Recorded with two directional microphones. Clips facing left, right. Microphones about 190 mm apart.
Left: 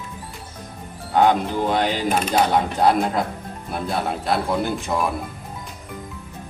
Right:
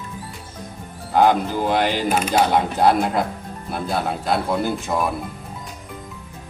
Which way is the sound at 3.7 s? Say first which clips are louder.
Right 1 dB; centre (ahead or behind).